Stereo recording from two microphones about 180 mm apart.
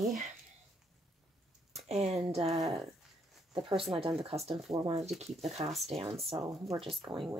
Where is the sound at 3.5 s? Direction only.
30° right (ahead or behind).